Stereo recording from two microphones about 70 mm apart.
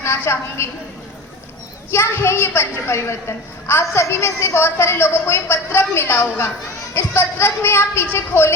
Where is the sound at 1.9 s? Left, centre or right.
Left.